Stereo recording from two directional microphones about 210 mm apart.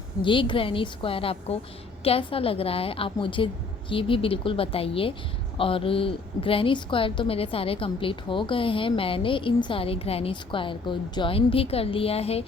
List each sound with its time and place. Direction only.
0.2 s a woman's voice: 25° left (ahead or behind)